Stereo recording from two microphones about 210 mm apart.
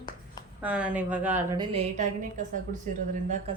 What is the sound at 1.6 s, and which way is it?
A woman's voice, 30° right (ahead or behind).